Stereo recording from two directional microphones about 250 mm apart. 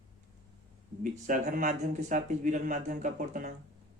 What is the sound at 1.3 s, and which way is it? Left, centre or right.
Speech, right.